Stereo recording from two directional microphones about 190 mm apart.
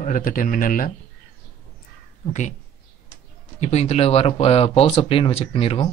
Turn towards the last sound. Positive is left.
turn(degrees=30)  # may be behind; listen again after turning